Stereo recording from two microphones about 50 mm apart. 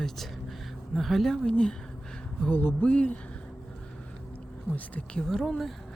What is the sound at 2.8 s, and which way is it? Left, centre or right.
Speech, left.